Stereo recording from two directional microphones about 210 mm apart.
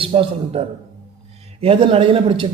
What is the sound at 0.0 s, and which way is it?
A man's voice, 25° right (ahead or behind).